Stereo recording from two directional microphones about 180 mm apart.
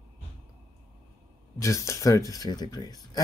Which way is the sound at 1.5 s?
15° left (ahead or behind).